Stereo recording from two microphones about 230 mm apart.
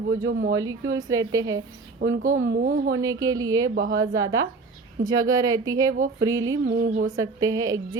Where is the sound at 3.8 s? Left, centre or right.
Right.